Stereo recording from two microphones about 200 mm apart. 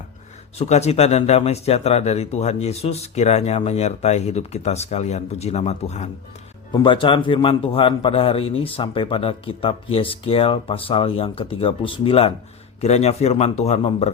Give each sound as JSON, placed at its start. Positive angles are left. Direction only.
{"t": 0.6, "sound": "a man's voice", "side_deg": 35}